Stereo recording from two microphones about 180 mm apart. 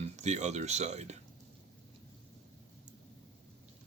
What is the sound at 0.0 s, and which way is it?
Speech, 40° right (ahead or behind).